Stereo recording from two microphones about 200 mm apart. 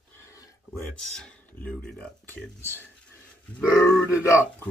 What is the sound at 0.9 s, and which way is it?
Speech, 5° left (ahead or behind).